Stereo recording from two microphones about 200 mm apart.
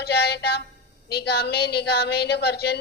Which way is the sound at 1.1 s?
55° left (ahead or behind).